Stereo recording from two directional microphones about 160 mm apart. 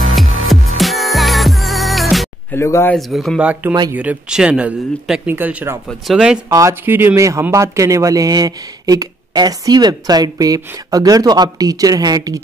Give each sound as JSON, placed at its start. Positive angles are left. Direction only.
{"t": 0.0, "sound": "music", "side_deg": 0}
{"t": 2.5, "sound": "speech", "side_deg": 15}
{"t": 3.0, "sound": "speech", "side_deg": 0}
{"t": 6.5, "sound": "speech", "side_deg": -15}